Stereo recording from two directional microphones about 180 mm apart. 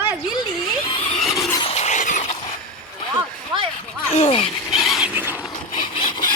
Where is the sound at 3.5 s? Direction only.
25° right (ahead or behind).